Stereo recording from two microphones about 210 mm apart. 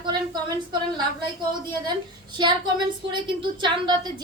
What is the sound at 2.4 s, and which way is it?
A woman's voice, 20° right (ahead or behind).